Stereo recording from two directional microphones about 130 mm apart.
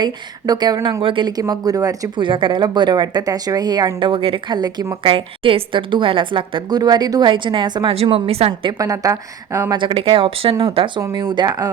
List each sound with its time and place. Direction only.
0.0 s a woman's voice: 30° right (ahead or behind)
2.2 s a woman's voice: 40° right (ahead or behind)
5.0 s a woman's voice: 45° right (ahead or behind)
7.9 s speech: 50° right (ahead or behind)
8.8 s speech: 25° right (ahead or behind)
9.7 s a woman's voice: 40° right (ahead or behind)